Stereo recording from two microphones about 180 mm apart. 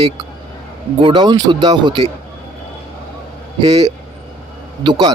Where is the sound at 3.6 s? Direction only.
35° right (ahead or behind).